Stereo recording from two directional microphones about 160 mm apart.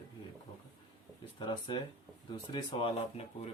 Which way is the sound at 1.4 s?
30° left (ahead or behind).